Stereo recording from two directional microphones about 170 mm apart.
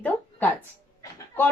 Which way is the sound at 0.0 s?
10° left (ahead or behind).